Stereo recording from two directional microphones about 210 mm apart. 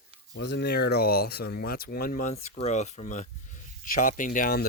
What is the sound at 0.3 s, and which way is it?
Speech, 55° left (ahead or behind).